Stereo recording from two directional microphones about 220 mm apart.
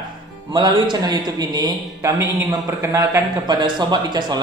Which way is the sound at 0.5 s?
20° right (ahead or behind).